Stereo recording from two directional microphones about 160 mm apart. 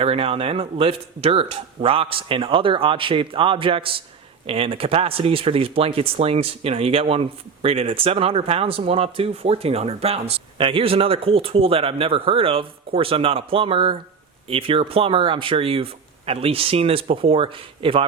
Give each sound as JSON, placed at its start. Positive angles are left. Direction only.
{"t": 0.0, "sound": "speech", "side_deg": -35}